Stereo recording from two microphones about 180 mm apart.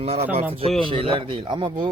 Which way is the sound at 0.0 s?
35° right (ahead or behind).